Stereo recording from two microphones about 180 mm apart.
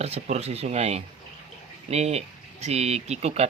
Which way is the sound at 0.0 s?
35° right (ahead or behind).